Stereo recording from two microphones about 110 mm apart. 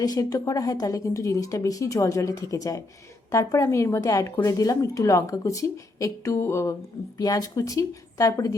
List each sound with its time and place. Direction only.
0.0 s a woman's voice: 35° left (ahead or behind)